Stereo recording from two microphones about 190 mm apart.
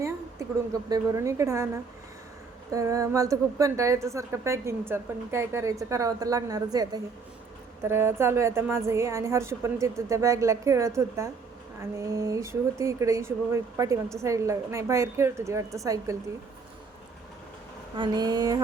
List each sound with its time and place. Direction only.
0.0 s a woman's voice: 15° right (ahead or behind)
17.9 s speech: 25° right (ahead or behind)